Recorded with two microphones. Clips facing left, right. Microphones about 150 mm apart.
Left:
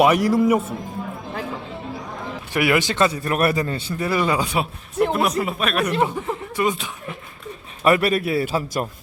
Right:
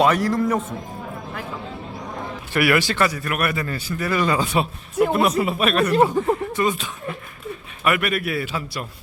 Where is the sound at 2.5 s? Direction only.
20° left (ahead or behind).